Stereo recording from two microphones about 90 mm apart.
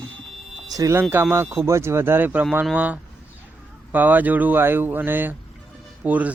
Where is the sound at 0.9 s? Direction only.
25° right (ahead or behind).